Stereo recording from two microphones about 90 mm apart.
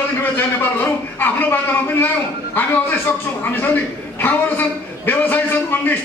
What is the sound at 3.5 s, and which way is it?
A man's voice, 20° left (ahead or behind).